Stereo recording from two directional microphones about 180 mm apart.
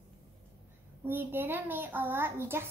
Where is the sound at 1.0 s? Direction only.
10° right (ahead or behind).